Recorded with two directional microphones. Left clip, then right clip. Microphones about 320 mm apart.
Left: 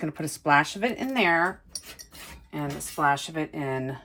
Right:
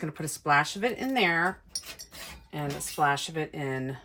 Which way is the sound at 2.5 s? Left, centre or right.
Centre.